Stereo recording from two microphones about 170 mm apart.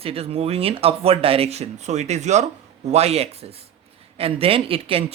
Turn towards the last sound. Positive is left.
turn(degrees=-35)  # may be behind; listen again after turning